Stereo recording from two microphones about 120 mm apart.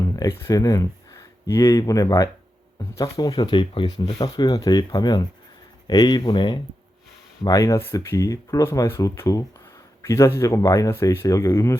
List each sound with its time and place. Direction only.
0.2 s speech: 25° left (ahead or behind)
7.4 s speech: 25° left (ahead or behind)